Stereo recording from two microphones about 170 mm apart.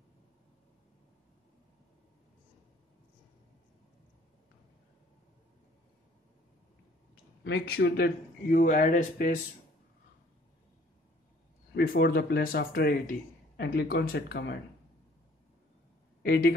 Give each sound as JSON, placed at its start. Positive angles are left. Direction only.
{"t": 7.4, "sound": "speech", "side_deg": 75}
{"t": 11.7, "sound": "speech", "side_deg": 65}
{"t": 16.2, "sound": "speech", "side_deg": 65}